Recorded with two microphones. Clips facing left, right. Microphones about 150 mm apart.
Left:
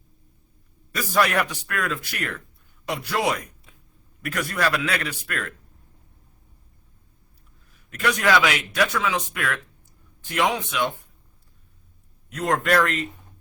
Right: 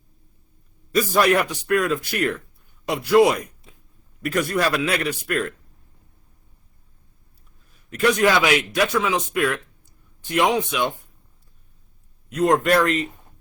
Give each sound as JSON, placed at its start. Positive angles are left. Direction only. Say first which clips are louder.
{"t": 1.1, "sound": "speech", "louder": "right 2 dB", "side_deg": -25}
{"t": 7.9, "sound": "speech", "louder": "right 4 dB", "side_deg": -25}
{"t": 12.3, "sound": "speech", "louder": "right 4 dB", "side_deg": -20}